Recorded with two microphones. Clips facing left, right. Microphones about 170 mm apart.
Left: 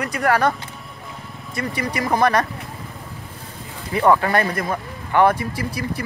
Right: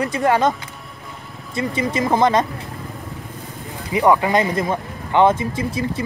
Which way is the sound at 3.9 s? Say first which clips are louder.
Right 1 dB; 15° right (ahead or behind).